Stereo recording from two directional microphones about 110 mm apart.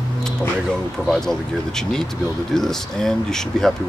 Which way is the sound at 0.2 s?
5° left (ahead or behind).